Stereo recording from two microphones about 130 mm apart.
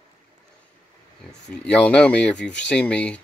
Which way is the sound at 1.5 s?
10° left (ahead or behind).